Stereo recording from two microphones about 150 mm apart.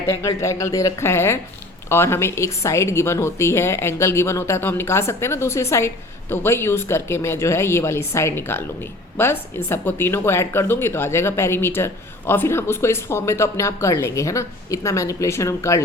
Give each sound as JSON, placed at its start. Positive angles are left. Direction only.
{"t": 0.1, "sound": "speech", "side_deg": 20}